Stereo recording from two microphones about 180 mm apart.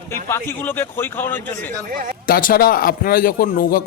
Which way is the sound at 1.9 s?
50° right (ahead or behind).